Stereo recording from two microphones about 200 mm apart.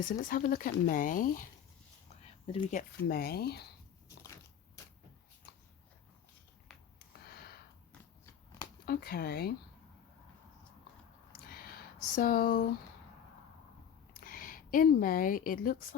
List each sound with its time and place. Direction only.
0.0 s speech: 45° left (ahead or behind)
2.2 s speech: 30° left (ahead or behind); by 3.7 s 55° left (ahead or behind)
7.3 s a sound: 50° left (ahead or behind)
8.9 s speech: 50° left (ahead or behind)
11.4 s a sound: 50° left (ahead or behind)
14.1 s a woman's voice: 45° left (ahead or behind)